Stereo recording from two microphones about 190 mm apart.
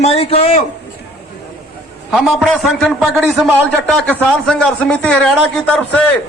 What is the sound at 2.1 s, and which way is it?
A man's voice, 5° right (ahead or behind).